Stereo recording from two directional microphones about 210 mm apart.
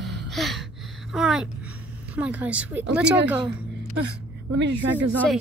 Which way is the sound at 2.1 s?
5° right (ahead or behind).